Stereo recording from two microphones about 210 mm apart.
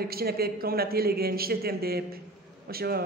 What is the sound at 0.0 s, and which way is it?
A man's voice, 45° right (ahead or behind).